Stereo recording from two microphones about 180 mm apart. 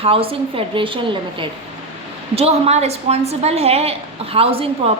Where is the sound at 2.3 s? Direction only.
35° right (ahead or behind).